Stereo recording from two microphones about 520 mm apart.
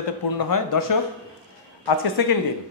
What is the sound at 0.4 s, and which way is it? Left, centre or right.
Speech, left.